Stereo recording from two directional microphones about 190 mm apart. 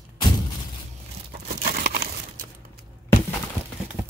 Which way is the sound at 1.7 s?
55° right (ahead or behind).